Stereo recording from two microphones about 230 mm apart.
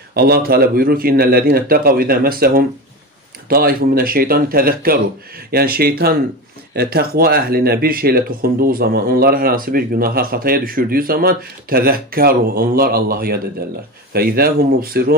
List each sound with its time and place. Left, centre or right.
0.1 s speech: right